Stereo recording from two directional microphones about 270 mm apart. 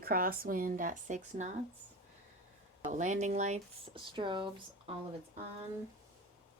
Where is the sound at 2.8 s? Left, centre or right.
Right.